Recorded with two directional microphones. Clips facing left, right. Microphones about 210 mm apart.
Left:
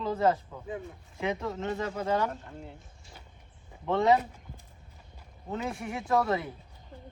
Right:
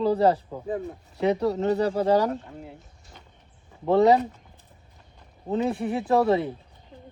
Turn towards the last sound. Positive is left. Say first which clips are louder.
# right 6 dB
turn(degrees=-30)  # may be behind; listen again after turning